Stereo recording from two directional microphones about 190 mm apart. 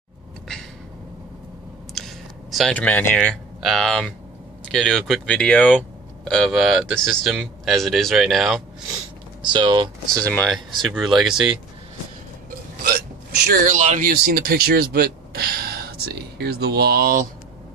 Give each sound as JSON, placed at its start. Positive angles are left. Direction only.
{"t": 2.0, "sound": "a sound", "side_deg": 0}
{"t": 3.6, "sound": "speech", "side_deg": 0}
{"t": 9.4, "sound": "speech", "side_deg": -25}
{"t": 10.2, "sound": "speech", "side_deg": 5}
{"t": 12.4, "sound": "hiccup", "side_deg": -50}
{"t": 13.7, "sound": "speech", "side_deg": -40}
{"t": 14.1, "sound": "speech", "side_deg": -55}